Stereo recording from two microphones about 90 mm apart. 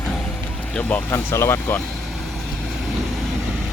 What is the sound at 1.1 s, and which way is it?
Speech, 30° left (ahead or behind).